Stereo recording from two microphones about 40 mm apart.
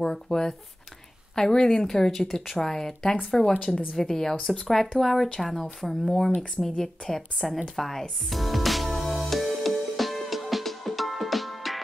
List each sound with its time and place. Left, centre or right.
0.0 s speech: centre
8.3 s music: centre